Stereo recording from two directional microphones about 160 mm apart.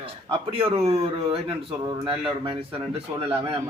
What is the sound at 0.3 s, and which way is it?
Speech, 35° right (ahead or behind).